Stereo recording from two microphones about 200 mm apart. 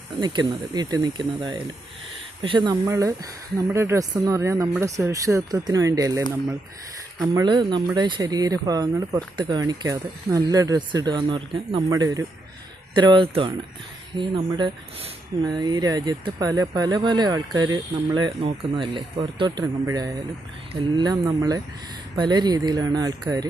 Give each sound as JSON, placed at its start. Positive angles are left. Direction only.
{"t": 0.2, "sound": "speech", "side_deg": -20}